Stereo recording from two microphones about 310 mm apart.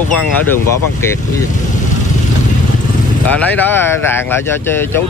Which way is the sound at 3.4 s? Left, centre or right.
Centre.